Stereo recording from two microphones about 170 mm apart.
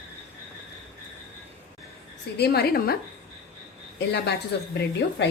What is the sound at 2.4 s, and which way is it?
Speech, 65° left (ahead or behind).